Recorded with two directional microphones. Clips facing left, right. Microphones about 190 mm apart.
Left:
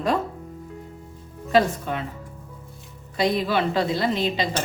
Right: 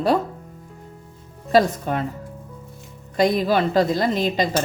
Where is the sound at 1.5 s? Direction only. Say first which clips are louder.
Right 2 dB; 40° right (ahead or behind).